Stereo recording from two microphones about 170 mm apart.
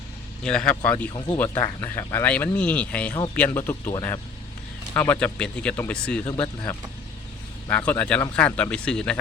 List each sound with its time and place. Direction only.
0.4 s speech: 5° left (ahead or behind)
5.2 s speech: 5° left (ahead or behind)
6.2 s speech: 30° left (ahead or behind)
7.7 s speech: 10° left (ahead or behind)